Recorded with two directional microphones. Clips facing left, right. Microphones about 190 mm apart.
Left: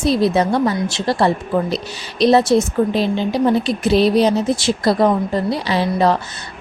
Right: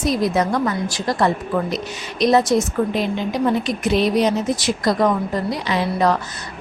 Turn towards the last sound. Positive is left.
turn(degrees=30)  # may be behind; listen again after turning